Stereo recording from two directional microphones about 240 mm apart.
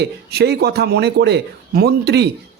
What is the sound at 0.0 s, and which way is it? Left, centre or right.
Speech, right.